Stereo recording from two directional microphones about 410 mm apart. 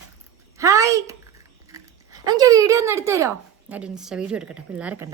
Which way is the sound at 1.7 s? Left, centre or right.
Centre.